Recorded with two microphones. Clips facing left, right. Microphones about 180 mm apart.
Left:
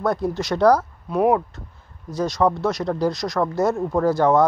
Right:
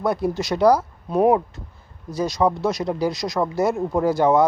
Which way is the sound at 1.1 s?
30° right (ahead or behind).